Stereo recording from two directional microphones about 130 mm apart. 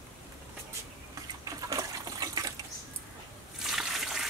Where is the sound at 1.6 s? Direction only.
30° right (ahead or behind).